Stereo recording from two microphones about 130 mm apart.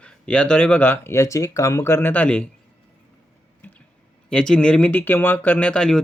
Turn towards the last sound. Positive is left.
turn(degrees=5)  # may be behind; listen again after turning